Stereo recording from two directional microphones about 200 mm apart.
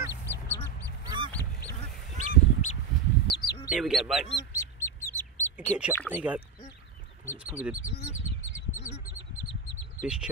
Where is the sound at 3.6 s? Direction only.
5° right (ahead or behind).